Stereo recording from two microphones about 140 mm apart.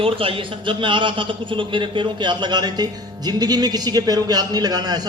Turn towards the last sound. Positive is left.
turn(degrees=-30)  # may be behind; listen again after turning